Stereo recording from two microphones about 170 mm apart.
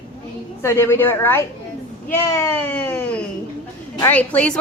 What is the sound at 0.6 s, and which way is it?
A woman's voice, 15° left (ahead or behind).